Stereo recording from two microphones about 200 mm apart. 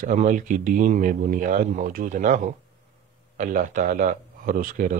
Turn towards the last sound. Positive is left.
turn(degrees=-45)  # may be behind; listen again after turning